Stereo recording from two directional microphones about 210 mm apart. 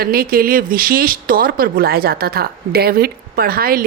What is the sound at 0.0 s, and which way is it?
Speech, 45° right (ahead or behind).